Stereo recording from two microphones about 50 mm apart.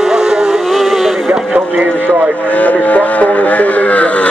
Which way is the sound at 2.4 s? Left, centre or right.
Left.